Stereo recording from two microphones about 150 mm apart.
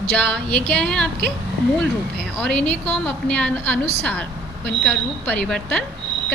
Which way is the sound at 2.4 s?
5° left (ahead or behind).